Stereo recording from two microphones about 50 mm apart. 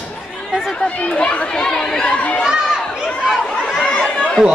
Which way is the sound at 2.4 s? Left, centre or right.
Centre.